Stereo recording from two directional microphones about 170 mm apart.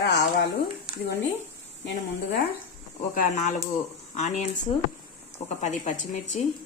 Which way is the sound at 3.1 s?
45° left (ahead or behind).